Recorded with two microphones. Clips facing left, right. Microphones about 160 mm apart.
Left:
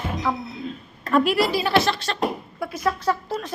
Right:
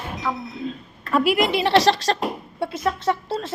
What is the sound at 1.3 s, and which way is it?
Speech, 20° right (ahead or behind).